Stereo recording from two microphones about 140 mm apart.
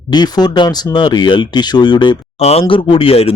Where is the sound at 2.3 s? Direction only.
50° left (ahead or behind).